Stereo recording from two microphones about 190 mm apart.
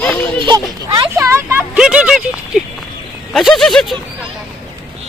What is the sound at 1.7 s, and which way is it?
Speech, 5° right (ahead or behind).